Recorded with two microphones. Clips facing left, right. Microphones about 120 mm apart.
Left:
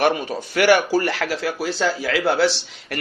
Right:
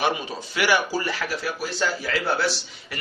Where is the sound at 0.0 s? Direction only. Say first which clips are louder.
Left 5 dB; 55° left (ahead or behind).